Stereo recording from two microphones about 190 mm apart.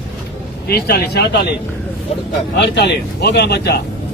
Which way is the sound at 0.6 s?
55° left (ahead or behind).